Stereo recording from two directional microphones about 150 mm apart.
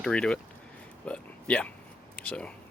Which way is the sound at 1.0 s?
10° left (ahead or behind).